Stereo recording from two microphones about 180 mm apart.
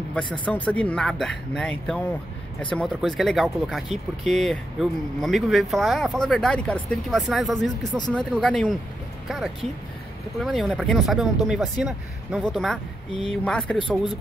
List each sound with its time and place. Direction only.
0.5 s speech: 5° left (ahead or behind)
13.7 s speech: 25° left (ahead or behind)